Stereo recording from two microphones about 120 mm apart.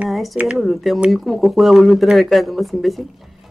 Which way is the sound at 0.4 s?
5° right (ahead or behind).